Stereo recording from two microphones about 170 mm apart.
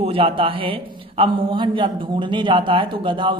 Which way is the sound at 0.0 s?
30° right (ahead or behind).